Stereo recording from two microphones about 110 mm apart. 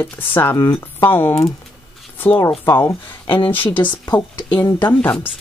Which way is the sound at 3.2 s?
50° left (ahead or behind).